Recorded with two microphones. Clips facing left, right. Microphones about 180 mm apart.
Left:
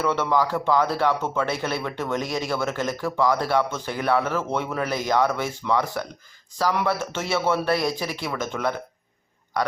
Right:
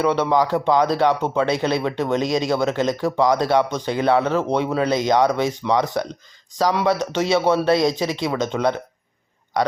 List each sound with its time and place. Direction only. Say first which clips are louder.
0.0 s speech: right 4 dB; 15° right (ahead or behind)